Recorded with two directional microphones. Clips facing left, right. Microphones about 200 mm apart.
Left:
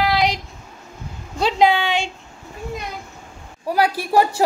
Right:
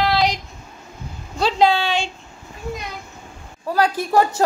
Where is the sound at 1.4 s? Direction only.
20° left (ahead or behind).